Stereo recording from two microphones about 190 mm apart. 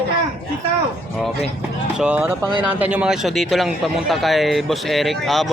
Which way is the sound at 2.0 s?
5° right (ahead or behind).